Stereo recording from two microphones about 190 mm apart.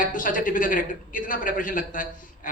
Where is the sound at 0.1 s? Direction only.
45° left (ahead or behind).